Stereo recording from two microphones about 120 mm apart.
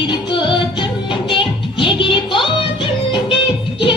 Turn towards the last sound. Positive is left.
turn(degrees=40)  # may be behind; listen again after turning